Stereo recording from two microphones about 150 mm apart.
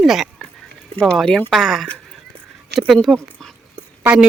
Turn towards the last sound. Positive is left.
turn(degrees=-5)  # may be behind; listen again after turning